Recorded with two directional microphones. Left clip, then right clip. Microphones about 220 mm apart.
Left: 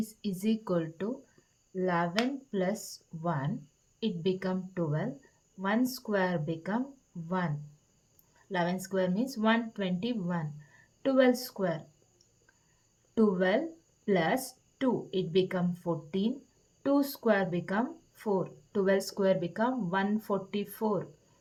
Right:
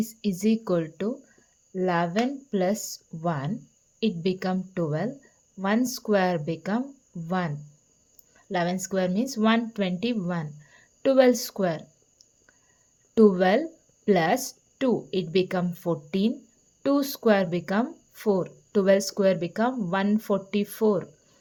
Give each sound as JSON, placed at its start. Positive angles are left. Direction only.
{"t": 0.0, "sound": "speech", "side_deg": -30}
{"t": 13.1, "sound": "speech", "side_deg": -35}